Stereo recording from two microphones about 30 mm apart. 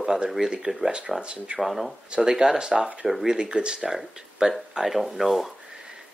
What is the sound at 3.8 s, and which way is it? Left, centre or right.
Speech, centre.